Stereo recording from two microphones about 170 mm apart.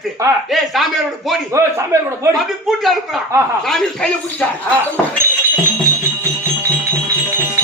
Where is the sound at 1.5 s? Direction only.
15° right (ahead or behind).